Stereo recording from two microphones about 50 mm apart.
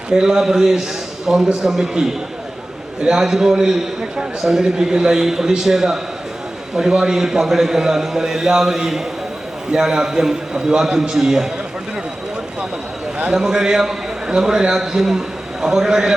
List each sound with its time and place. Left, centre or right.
0.1 s a man's voice: centre
13.1 s a man's voice: right
13.4 s a man's voice: centre